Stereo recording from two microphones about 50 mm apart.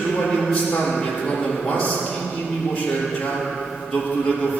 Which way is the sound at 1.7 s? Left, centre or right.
Left.